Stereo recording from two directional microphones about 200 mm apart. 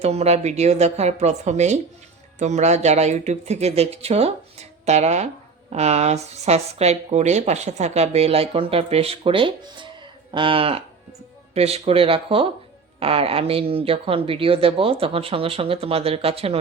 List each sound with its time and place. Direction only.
0.0 s speech: 30° right (ahead or behind)